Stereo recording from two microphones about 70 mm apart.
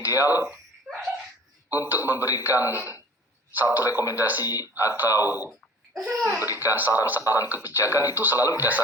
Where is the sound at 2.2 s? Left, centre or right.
Left.